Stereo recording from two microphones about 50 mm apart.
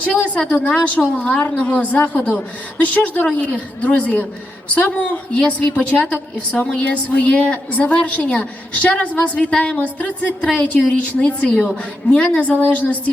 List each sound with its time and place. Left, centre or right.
0.0 s a woman's voice: left